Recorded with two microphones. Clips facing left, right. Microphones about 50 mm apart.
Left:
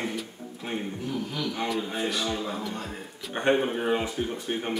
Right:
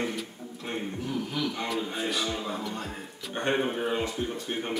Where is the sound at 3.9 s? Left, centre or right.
Centre.